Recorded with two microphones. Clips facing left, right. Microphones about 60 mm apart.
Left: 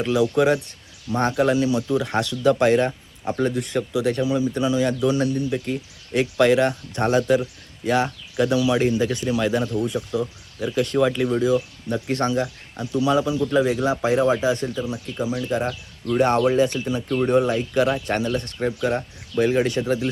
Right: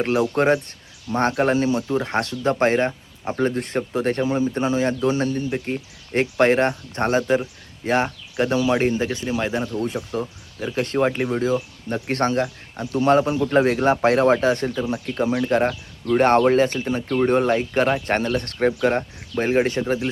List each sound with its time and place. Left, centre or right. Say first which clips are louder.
0.0 s speech: even; right
9.7 s speech: left 1 dB; right
12.0 s speech: right 2 dB; right
17.2 s speech: right 1 dB; right